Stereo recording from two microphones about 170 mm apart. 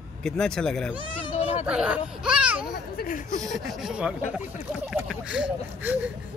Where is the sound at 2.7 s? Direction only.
55° left (ahead or behind).